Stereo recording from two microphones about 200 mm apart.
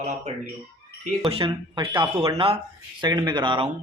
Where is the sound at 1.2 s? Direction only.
25° right (ahead or behind).